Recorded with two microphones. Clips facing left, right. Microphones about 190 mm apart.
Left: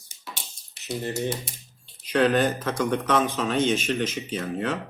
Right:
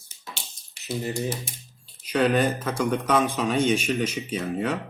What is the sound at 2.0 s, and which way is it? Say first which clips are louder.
Speech: left 1 dB; 10° right (ahead or behind).